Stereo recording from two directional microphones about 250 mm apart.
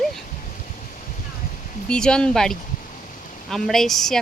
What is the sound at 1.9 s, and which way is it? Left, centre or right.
Speech, centre.